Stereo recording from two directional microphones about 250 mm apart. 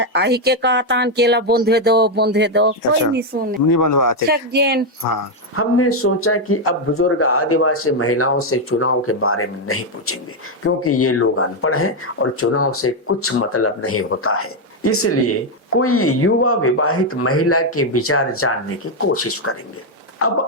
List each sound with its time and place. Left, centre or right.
0.0 s speech: right
5.5 s speech: left